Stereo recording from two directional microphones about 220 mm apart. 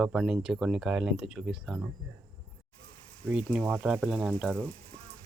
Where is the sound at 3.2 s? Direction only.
5° left (ahead or behind).